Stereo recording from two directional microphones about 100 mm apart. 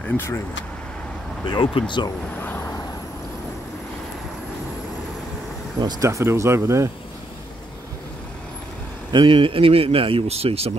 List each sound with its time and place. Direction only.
1.4 s speech: 50° left (ahead or behind)
2.3 s vehicle: 20° left (ahead or behind)
5.8 s speech: 45° right (ahead or behind)
6.0 s speech: 30° right (ahead or behind)
9.1 s speech: 60° right (ahead or behind); by 10.7 s 90° right